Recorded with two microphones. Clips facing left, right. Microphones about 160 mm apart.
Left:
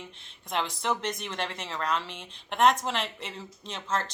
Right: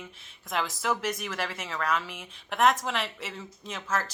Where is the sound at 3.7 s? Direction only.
30° left (ahead or behind).